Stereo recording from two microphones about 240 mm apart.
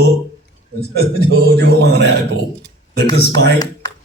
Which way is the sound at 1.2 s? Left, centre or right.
Right.